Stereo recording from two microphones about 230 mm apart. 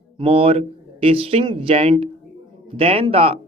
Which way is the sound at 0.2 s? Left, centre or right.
Right.